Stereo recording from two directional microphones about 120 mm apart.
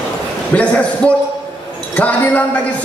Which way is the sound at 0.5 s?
10° left (ahead or behind).